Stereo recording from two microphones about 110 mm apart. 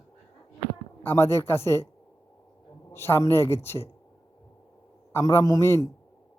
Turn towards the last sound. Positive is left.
turn(degrees=25)  # may be behind; listen again after turning